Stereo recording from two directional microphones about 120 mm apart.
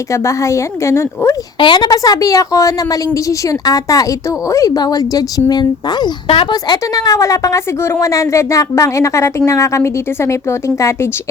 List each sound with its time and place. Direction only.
0.1 s a woman's voice: 25° left (ahead or behind)
1.5 s a woman's voice: 40° left (ahead or behind)
6.2 s speech: 50° left (ahead or behind)
6.5 s a woman's voice: 35° left (ahead or behind)